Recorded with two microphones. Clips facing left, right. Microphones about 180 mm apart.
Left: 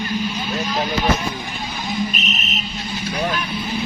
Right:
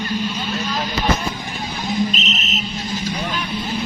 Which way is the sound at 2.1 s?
20° right (ahead or behind).